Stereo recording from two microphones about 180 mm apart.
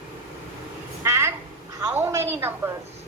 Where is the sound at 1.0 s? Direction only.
15° right (ahead or behind).